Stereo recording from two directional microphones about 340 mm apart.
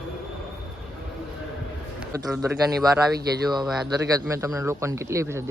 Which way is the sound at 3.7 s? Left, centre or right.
Centre.